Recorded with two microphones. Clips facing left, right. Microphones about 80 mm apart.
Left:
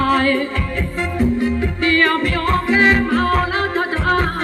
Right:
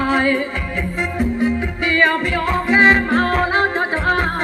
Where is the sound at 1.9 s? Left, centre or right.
Centre.